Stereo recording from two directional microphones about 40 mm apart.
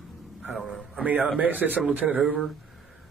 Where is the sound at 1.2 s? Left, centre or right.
Right.